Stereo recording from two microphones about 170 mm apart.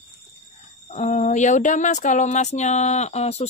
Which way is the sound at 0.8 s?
45° left (ahead or behind).